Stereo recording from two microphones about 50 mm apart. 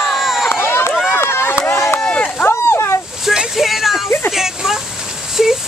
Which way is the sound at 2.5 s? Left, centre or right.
Left.